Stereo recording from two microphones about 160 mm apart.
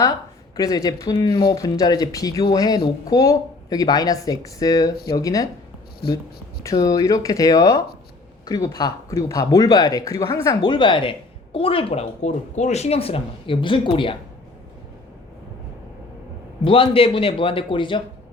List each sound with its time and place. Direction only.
0.5 s speech: 20° left (ahead or behind)
6.6 s speech: 20° left (ahead or behind)
16.6 s speech: 35° left (ahead or behind)